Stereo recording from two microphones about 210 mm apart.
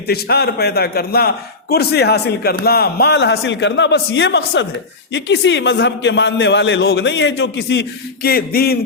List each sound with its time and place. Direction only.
0.1 s a man's voice: 50° left (ahead or behind)